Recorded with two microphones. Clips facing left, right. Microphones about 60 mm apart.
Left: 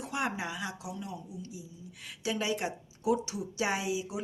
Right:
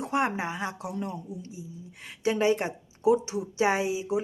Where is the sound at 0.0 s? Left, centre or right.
Right.